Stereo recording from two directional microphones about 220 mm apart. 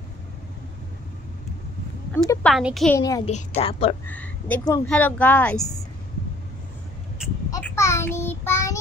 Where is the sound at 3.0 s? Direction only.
15° left (ahead or behind).